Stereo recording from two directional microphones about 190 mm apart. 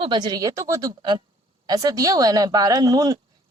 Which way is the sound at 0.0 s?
25° right (ahead or behind).